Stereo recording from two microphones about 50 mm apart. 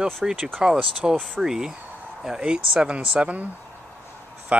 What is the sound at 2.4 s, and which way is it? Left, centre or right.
Speech, centre.